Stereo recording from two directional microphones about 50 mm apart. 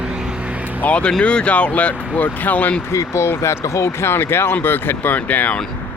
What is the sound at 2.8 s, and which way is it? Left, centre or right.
Speech, left.